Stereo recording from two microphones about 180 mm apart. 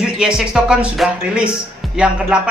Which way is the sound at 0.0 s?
5° right (ahead or behind).